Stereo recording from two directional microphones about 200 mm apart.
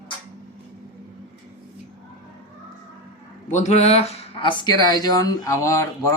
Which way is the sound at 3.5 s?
35° left (ahead or behind).